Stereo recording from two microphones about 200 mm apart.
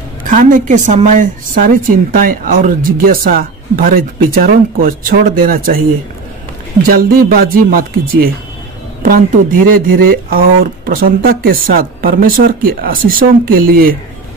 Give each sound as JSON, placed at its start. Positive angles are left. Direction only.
{"t": 0.3, "sound": "a woman's voice", "side_deg": -40}
{"t": 6.8, "sound": "a woman's voice", "side_deg": -45}
{"t": 9.0, "sound": "a woman's voice", "side_deg": -45}